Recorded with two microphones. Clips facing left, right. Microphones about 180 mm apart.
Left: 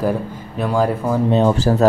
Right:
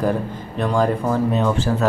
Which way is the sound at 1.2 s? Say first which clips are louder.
Left 4 dB; 30° left (ahead or behind).